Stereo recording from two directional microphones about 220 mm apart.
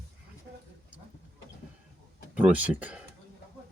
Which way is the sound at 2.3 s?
5° right (ahead or behind).